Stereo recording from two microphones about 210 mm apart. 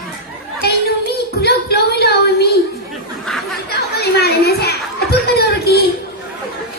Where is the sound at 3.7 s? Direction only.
50° left (ahead or behind).